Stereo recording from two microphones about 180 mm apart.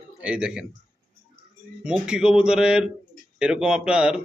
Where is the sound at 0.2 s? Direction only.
5° right (ahead or behind).